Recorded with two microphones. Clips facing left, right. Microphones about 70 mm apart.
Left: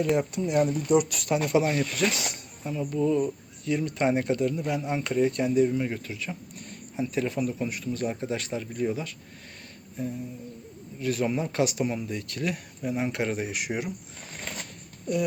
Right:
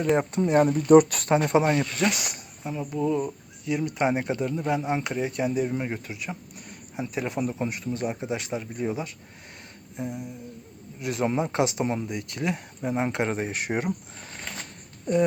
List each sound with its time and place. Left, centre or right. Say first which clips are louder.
0.2 s speech: right 3 dB; right
1.3 s speech: even; right